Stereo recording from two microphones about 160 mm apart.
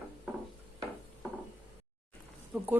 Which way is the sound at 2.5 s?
5° right (ahead or behind).